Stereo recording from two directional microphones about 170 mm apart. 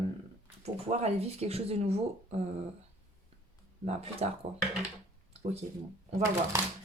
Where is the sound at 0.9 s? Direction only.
35° right (ahead or behind).